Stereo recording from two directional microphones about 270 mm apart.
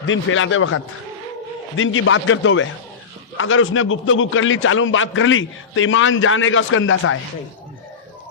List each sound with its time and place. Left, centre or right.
0.0 s a man's voice: left
1.8 s a man's voice: left